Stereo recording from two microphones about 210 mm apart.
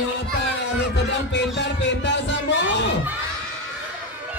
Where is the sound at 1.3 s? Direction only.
55° left (ahead or behind).